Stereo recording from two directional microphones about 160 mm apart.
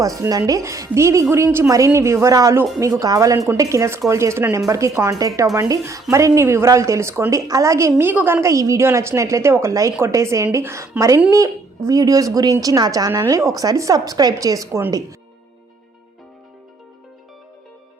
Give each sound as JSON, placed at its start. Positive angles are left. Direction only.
{"t": 0.0, "sound": "a woman's voice", "side_deg": -20}